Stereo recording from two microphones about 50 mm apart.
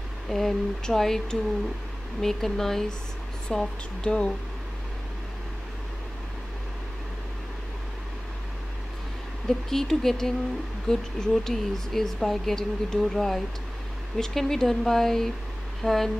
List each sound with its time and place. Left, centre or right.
0.3 s speech: centre
9.5 s speech: centre